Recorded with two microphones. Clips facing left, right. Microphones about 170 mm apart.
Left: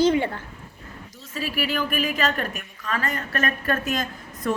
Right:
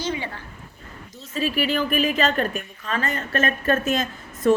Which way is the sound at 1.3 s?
25° right (ahead or behind).